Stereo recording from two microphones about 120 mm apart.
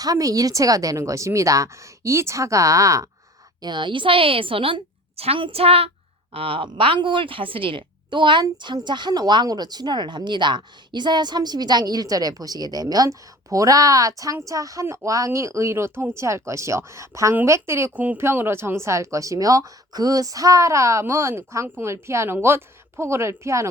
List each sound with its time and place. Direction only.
0.0 s speech: 30° right (ahead or behind)
3.6 s a woman's voice: 40° right (ahead or behind); by 23.6 s 25° right (ahead or behind)